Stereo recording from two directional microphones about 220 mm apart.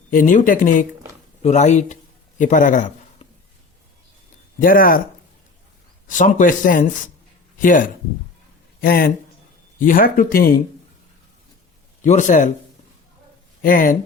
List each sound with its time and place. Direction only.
0.1 s speech: 35° left (ahead or behind)
4.6 s speech: 40° left (ahead or behind)
6.1 s speech: 35° left (ahead or behind)
12.0 s speech: 35° left (ahead or behind)
13.6 s speech: 40° left (ahead or behind)